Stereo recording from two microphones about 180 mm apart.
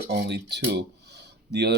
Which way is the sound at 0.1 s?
70° right (ahead or behind).